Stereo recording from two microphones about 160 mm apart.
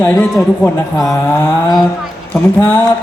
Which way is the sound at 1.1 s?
20° left (ahead or behind).